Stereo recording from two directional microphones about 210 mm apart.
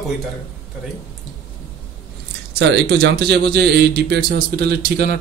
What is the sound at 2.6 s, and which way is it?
A man's voice, 55° right (ahead or behind).